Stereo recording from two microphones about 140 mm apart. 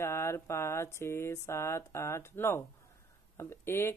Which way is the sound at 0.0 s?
20° left (ahead or behind).